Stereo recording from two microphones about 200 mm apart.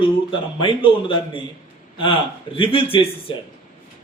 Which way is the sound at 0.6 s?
25° left (ahead or behind).